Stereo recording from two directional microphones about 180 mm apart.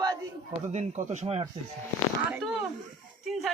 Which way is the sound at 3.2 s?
Centre (ahead or behind).